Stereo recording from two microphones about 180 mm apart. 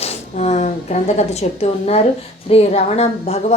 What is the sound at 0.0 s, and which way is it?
A woman's voice, 35° left (ahead or behind).